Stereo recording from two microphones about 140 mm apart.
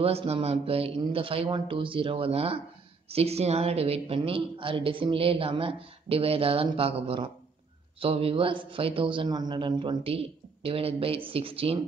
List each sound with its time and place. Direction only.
0.0 s a man's voice: 45° right (ahead or behind)